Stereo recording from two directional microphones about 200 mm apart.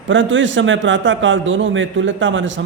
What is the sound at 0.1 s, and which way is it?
A man's voice, 70° right (ahead or behind).